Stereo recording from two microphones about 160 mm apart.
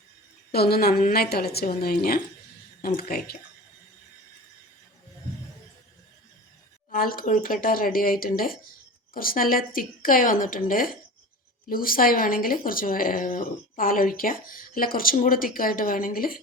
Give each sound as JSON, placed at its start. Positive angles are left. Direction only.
{"t": 0.5, "sound": "a woman's voice", "side_deg": 75}
{"t": 6.9, "sound": "speech", "side_deg": 65}